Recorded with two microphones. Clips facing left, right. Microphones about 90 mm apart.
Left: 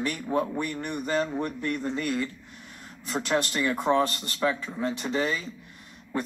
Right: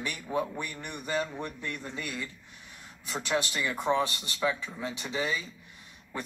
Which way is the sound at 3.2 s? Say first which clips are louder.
Left 4 dB; centre (ahead or behind).